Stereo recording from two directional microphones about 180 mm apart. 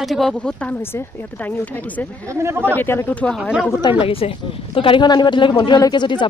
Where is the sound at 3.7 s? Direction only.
25° left (ahead or behind).